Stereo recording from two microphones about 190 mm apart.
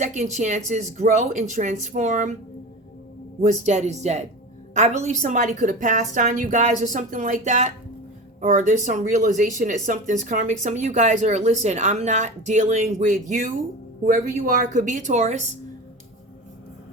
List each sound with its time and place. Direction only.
0.0 s speech: 40° right (ahead or behind)
3.4 s a woman's voice: 35° right (ahead or behind)